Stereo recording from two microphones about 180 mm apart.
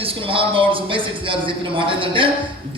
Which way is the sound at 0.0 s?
30° right (ahead or behind).